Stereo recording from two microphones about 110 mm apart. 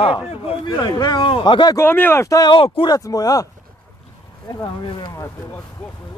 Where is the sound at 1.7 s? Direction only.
20° left (ahead or behind).